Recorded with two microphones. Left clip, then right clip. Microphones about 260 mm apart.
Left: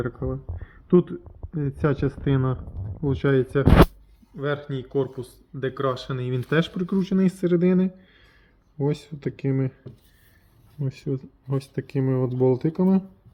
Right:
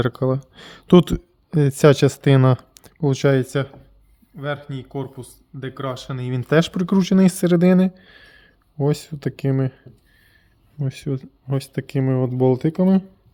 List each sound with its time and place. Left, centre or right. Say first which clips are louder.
0.0 s speech: right 8 dB; right
10.8 s speech: right 2 dB; right